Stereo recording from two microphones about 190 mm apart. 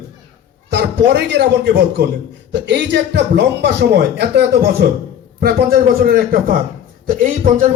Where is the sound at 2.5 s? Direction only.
65° right (ahead or behind).